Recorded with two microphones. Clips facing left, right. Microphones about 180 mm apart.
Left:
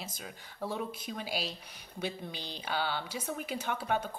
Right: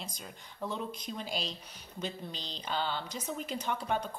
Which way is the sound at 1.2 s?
5° left (ahead or behind).